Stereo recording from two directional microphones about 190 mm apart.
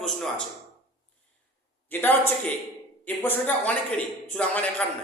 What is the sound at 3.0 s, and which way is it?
A man's voice, 10° left (ahead or behind).